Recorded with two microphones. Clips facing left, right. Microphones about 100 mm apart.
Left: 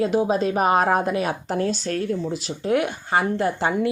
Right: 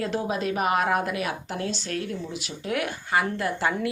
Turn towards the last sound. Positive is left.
turn(degrees=25)  # may be behind; listen again after turning